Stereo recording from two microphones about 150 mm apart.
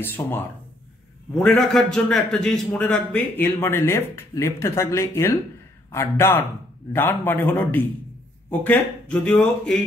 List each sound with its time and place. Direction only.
0.0 s a man's voice: 15° left (ahead or behind)